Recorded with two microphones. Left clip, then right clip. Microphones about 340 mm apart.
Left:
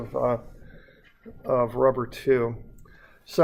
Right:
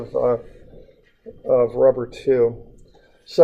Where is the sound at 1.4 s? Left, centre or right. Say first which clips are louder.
Right 6 dB; left.